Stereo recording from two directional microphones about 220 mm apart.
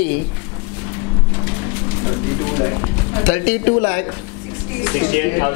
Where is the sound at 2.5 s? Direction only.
25° left (ahead or behind).